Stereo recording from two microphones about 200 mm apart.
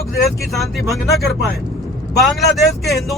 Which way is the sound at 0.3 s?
Centre (ahead or behind).